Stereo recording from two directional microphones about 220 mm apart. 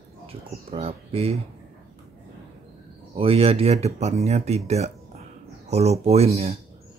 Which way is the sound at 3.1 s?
25° right (ahead or behind).